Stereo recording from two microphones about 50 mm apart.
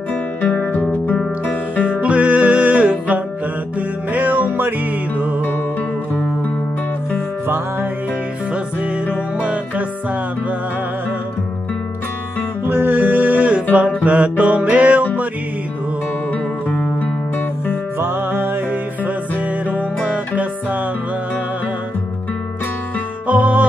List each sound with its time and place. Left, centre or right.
0.4 s music: left
1.1 s music: left
2.0 s music: right
9.4 s music: right
12.6 s music: right
16.6 s music: left
17.9 s music: right
23.2 s music: right